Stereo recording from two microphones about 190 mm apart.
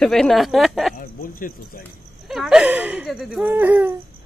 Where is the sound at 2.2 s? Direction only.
Centre (ahead or behind).